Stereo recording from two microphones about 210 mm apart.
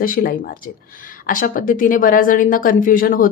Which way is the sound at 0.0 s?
45° left (ahead or behind).